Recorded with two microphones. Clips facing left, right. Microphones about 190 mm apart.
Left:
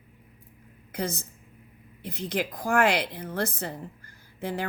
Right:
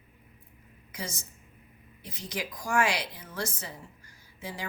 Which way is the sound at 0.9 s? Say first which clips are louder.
Left 8 dB; 60° left (ahead or behind).